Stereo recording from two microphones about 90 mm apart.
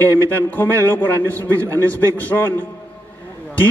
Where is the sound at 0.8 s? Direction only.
25° left (ahead or behind).